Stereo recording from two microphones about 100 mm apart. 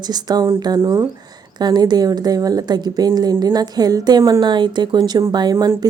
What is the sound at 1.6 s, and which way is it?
Speech, 45° right (ahead or behind).